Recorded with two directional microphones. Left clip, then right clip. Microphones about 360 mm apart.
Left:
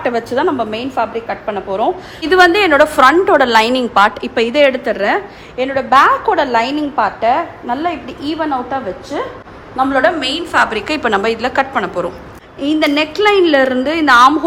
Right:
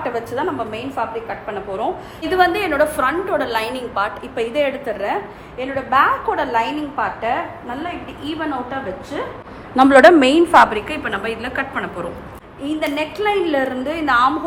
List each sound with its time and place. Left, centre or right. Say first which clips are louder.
0.0 s a woman's voice: left 7 dB; left
9.7 s a woman's voice: right 4 dB; right
10.5 s a woman's voice: right 1 dB; centre
12.6 s a woman's voice: left 8 dB; left